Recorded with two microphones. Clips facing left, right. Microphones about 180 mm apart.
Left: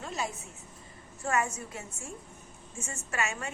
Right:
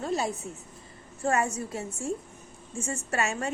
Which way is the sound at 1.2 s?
35° right (ahead or behind).